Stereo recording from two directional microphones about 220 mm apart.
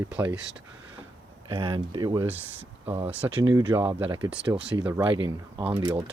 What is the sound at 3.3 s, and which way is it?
Speech, 20° right (ahead or behind).